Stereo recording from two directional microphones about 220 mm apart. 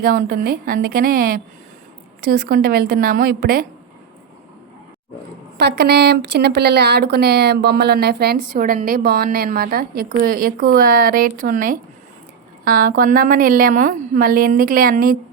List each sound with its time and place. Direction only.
0.0 s speech: 40° right (ahead or behind)
5.5 s a woman's voice: 50° right (ahead or behind)